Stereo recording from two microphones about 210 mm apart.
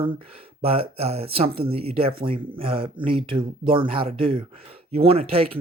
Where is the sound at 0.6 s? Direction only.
25° right (ahead or behind).